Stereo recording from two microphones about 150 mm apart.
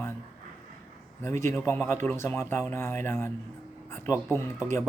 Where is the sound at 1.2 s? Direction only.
20° left (ahead or behind).